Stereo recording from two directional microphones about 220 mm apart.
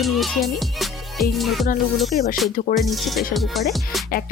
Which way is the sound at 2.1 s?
40° left (ahead or behind).